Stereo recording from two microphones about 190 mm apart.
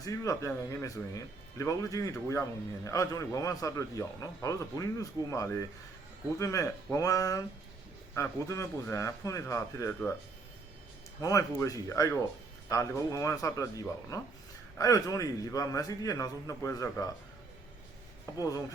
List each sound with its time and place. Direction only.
0.0 s a man's voice: 15° left (ahead or behind)
11.2 s a man's voice: 15° left (ahead or behind)
18.3 s a man's voice: 15° left (ahead or behind)